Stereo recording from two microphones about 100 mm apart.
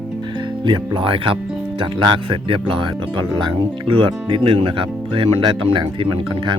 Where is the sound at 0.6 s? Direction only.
55° right (ahead or behind).